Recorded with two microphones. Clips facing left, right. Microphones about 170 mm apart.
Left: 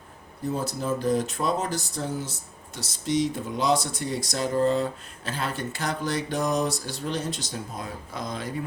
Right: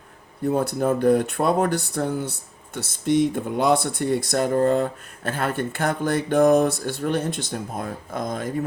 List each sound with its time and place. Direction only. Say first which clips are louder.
0.4 s speech: right 7 dB; 60° right (ahead or behind)